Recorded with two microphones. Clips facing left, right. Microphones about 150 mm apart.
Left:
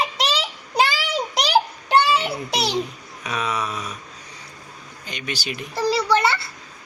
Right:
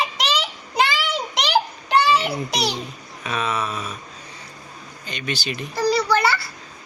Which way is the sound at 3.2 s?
15° left (ahead or behind).